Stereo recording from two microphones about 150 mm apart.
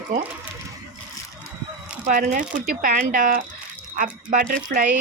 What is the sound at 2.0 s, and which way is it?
Speech, 60° right (ahead or behind).